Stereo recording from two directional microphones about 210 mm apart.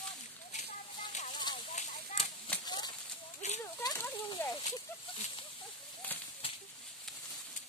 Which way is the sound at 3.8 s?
15° left (ahead or behind).